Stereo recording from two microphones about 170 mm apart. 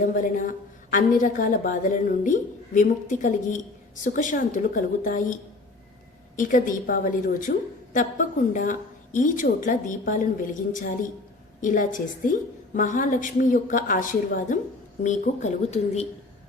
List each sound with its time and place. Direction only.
0.0 s a woman's voice: 50° left (ahead or behind)
6.3 s a woman's voice: 50° left (ahead or behind)